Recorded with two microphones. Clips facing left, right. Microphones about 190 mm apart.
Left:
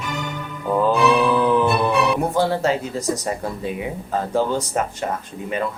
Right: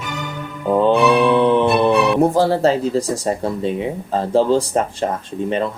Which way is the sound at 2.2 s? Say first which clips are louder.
Right 5 dB; 35° right (ahead or behind).